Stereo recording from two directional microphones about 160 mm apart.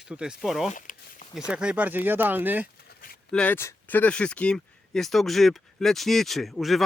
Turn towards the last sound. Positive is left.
turn(degrees=0)  # may be behind; listen again after turning